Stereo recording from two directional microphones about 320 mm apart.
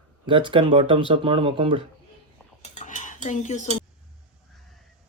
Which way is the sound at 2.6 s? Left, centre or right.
Left.